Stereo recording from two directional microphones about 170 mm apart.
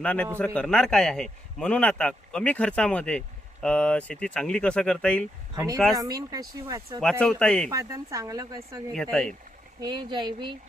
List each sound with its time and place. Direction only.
0.0 s a man's voice: 10° left (ahead or behind)
5.5 s speech: 20° right (ahead or behind)
7.0 s a man's voice: 5° left (ahead or behind)
7.7 s speech: 20° right (ahead or behind)
8.9 s a man's voice: 5° left (ahead or behind)
9.8 s speech: 25° right (ahead or behind)